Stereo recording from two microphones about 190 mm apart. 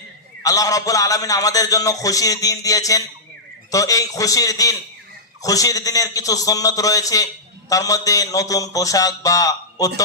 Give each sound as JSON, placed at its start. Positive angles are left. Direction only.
{"t": 0.4, "sound": "a man's voice", "side_deg": 20}